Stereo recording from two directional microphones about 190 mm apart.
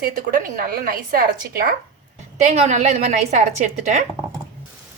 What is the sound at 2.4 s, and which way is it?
A woman's voice, 35° right (ahead or behind).